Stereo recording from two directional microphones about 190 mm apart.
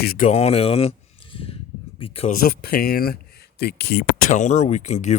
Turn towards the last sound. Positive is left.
turn(degrees=40)  # may be behind; listen again after turning